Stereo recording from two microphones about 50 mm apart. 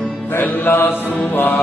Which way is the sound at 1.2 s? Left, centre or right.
Left.